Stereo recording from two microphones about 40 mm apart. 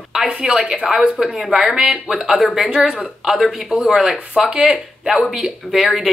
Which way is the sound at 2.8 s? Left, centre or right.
Centre.